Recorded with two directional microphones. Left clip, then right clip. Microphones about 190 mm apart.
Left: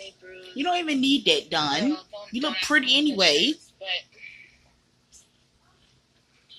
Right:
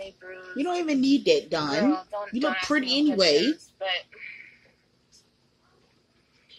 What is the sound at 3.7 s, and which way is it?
Speech, 50° right (ahead or behind).